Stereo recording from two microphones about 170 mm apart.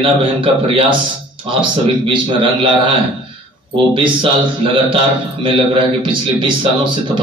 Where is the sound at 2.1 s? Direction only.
30° right (ahead or behind).